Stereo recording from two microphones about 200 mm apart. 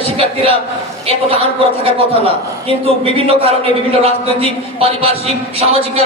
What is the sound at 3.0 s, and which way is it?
A man's voice, 30° right (ahead or behind).